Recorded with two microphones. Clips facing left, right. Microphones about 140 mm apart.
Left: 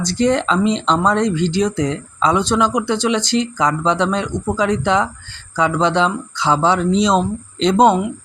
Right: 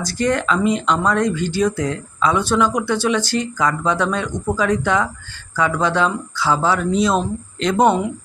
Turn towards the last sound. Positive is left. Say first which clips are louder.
# left 3 dB
turn(degrees=20)  # may be behind; listen again after turning